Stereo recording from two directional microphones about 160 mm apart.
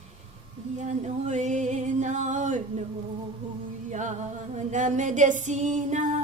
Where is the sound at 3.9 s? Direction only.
50° right (ahead or behind).